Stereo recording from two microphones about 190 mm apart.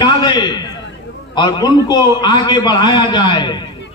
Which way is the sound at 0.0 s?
20° left (ahead or behind).